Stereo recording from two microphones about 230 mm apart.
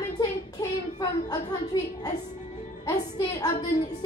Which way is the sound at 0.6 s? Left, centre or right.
Centre.